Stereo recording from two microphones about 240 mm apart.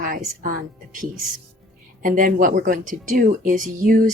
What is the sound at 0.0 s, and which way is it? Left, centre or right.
Speech, right.